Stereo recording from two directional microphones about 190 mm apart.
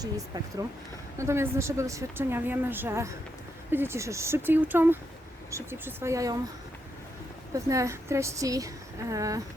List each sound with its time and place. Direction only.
0.3 s a woman's voice: 20° right (ahead or behind)
7.5 s a woman's voice: 15° right (ahead or behind)